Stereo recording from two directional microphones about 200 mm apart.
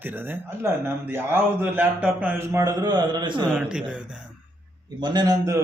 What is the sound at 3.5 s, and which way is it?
Speech, 5° right (ahead or behind).